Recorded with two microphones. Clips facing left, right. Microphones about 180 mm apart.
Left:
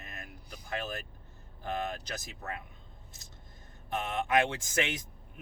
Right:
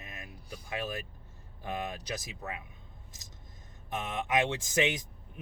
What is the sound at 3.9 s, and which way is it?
Speech, 20° right (ahead or behind).